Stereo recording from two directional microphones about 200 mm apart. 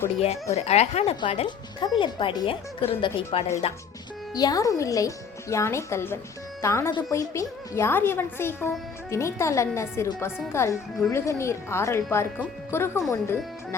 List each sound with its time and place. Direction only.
0.5 s speech: 30° left (ahead or behind)
4.4 s a woman's voice: 20° left (ahead or behind)